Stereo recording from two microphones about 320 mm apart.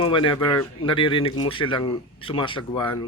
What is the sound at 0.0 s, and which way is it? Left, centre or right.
Speech, centre.